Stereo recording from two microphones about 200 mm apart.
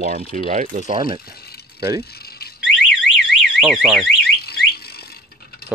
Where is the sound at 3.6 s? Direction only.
Centre (ahead or behind).